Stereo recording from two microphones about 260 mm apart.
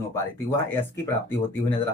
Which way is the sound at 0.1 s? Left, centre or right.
Centre.